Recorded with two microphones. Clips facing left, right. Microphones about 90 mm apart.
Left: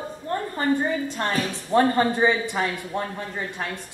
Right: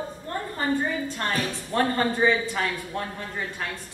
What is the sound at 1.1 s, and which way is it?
A woman's voice, 15° left (ahead or behind).